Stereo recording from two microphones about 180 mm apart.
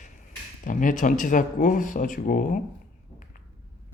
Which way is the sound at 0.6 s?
45° left (ahead or behind).